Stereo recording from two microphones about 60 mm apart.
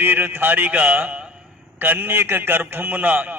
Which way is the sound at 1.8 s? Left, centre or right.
Right.